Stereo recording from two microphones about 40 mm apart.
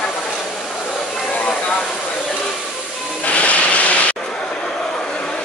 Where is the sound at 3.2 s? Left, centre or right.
Left.